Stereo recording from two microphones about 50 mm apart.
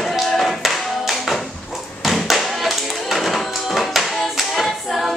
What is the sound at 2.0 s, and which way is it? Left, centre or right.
Music, centre.